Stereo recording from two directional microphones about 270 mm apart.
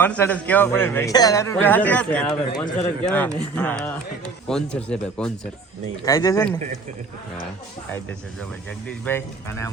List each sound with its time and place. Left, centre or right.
0.0 s a man's voice: centre
8.9 s a man's voice: centre